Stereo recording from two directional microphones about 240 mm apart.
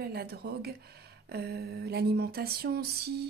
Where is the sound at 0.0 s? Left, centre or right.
Right.